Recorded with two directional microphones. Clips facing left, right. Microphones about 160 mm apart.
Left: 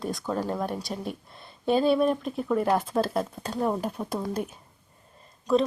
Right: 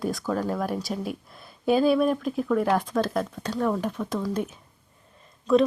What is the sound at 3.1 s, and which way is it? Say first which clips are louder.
Speech: right 1 dB; 30° left (ahead or behind).